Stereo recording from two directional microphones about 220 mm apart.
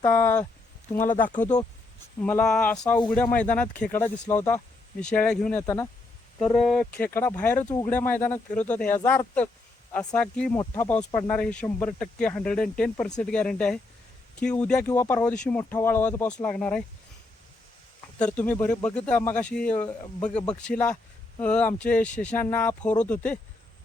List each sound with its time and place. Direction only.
0.0 s speech: 10° left (ahead or behind)
1.0 s speech: 35° left (ahead or behind)
2.2 s speech: 5° left (ahead or behind)
2.8 s speech: 15° left (ahead or behind)
6.4 s speech: centre (ahead or behind)
18.2 s speech: 5° left (ahead or behind)